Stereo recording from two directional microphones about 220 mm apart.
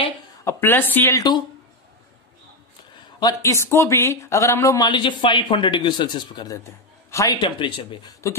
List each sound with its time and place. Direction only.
0.0 s a woman's voice: 10° left (ahead or behind)
3.2 s speech: 15° left (ahead or behind)